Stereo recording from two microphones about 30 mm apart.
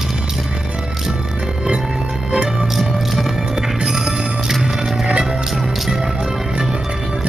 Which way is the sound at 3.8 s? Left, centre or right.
Centre.